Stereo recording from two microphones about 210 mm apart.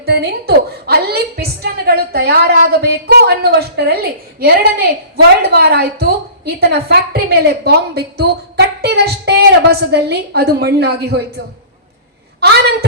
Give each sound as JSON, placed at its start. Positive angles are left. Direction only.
{"t": 0.0, "sound": "a woman's voice", "side_deg": -50}